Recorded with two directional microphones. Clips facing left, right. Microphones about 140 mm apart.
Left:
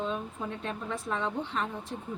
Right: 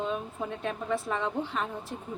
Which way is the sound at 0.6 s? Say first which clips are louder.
Right 4 dB; centre (ahead or behind).